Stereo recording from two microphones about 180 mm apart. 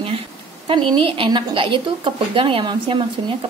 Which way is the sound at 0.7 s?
30° right (ahead or behind).